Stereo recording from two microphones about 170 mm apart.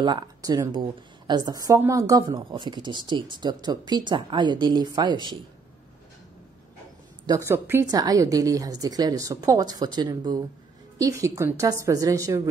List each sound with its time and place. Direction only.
0.0 s speech: 25° right (ahead or behind)
7.2 s speech: 15° right (ahead or behind)